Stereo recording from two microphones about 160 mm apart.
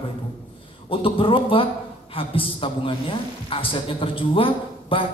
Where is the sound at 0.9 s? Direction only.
35° left (ahead or behind).